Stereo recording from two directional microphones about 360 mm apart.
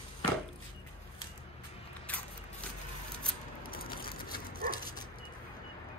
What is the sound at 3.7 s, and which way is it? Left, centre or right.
Crushing, left.